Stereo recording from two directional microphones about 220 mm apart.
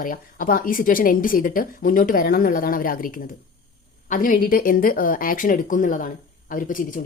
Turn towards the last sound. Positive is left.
turn(degrees=35)  # may be behind; listen again after turning